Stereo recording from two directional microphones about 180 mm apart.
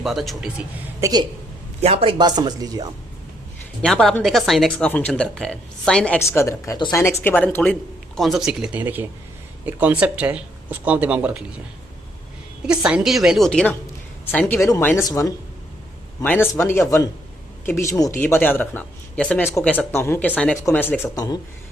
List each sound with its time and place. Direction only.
0.0 s a woman's voice: centre (ahead or behind)
1.0 s speech: 20° right (ahead or behind)
1.8 s speech: 35° right (ahead or behind)
3.8 s a woman's voice: 5° left (ahead or behind)
12.6 s a woman's voice: 5° right (ahead or behind); by 21.3 s 15° left (ahead or behind)